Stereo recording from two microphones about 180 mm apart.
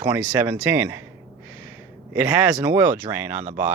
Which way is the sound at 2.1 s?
10° right (ahead or behind).